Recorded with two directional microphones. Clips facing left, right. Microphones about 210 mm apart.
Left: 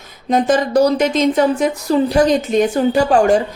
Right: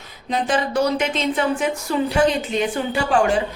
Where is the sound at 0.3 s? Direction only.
45° left (ahead or behind).